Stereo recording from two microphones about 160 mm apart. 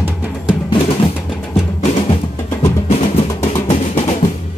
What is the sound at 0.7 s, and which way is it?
Music, 30° left (ahead or behind).